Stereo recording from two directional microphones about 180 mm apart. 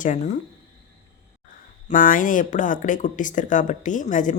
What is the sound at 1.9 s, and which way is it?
Speech, 50° left (ahead or behind).